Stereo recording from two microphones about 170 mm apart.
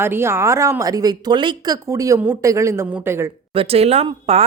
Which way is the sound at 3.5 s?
35° right (ahead or behind).